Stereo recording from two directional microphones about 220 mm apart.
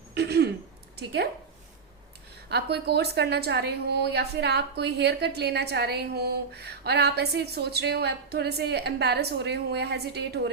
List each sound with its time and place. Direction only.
0.1 s throat clearing: 50° right (ahead or behind)
0.9 s a woman's voice: 50° right (ahead or behind)
2.5 s a woman's voice: 50° right (ahead or behind)